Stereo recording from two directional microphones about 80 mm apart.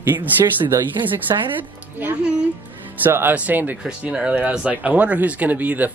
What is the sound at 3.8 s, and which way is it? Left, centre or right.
Speech, centre.